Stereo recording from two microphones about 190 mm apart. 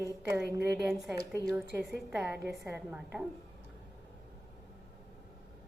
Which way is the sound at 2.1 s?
5° right (ahead or behind).